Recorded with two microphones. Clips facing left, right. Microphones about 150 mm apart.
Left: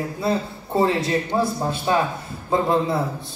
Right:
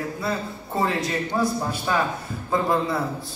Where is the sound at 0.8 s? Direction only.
30° left (ahead or behind).